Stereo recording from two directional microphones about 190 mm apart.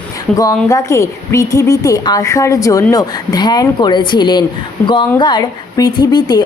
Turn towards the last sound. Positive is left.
turn(degrees=20)  # may be behind; listen again after turning